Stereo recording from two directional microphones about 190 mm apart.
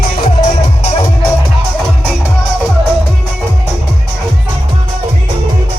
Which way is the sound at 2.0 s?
Centre (ahead or behind).